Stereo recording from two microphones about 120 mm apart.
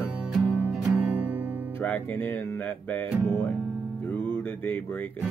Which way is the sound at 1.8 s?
15° left (ahead or behind).